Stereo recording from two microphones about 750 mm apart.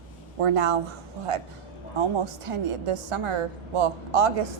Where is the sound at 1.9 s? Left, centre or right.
Right.